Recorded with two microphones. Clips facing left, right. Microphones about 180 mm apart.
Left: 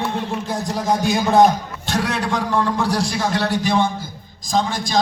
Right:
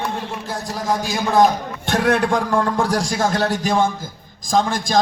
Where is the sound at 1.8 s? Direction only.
55° right (ahead or behind).